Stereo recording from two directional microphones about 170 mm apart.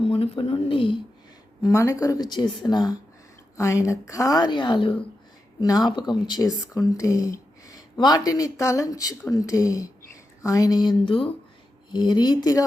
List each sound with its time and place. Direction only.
0.0 s speech: 35° left (ahead or behind)
1.6 s speech: 15° left (ahead or behind)